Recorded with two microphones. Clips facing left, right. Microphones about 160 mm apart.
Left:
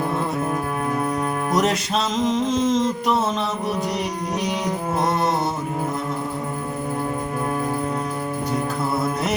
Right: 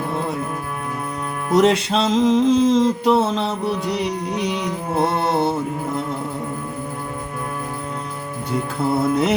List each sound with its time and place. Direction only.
1.5 s music: 30° right (ahead or behind)